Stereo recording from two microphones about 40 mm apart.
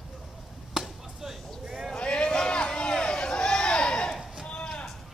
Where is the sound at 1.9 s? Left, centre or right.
Left.